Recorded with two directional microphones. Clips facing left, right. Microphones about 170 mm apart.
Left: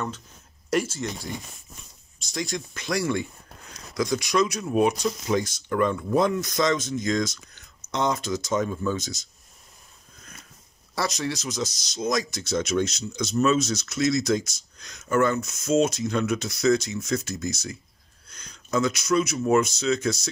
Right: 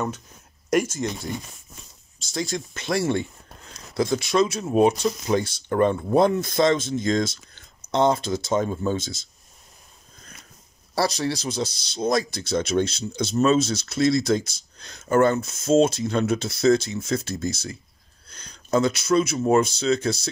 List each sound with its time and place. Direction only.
0.7 s speech: 45° right (ahead or behind)
2.3 s speech: 30° right (ahead or behind)
11.0 s speech: 30° right (ahead or behind)